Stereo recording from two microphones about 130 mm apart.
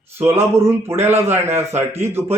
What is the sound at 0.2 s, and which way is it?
Speech, 20° right (ahead or behind).